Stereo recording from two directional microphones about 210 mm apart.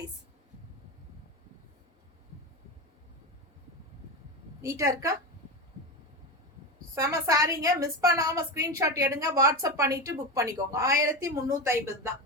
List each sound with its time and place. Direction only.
4.6 s a woman's voice: 15° right (ahead or behind)
6.9 s a woman's voice: 15° right (ahead or behind)